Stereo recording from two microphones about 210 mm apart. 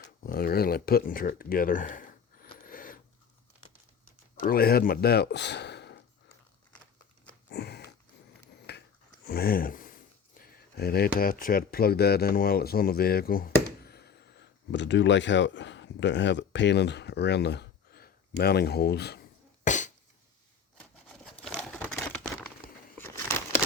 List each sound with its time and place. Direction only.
0.2 s speech: 45° left (ahead or behind)
2.6 s a sound: 40° left (ahead or behind)
4.4 s speech: 45° left (ahead or behind)
7.5 s sniff: 50° left (ahead or behind)
8.7 s dog: 55° left (ahead or behind)
9.2 s speech: 45° left (ahead or behind)
19.6 s cough: 35° left (ahead or behind)
20.7 s a sound: 5° left (ahead or behind)